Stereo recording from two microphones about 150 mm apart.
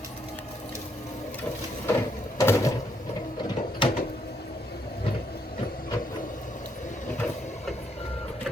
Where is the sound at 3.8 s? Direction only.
35° left (ahead or behind).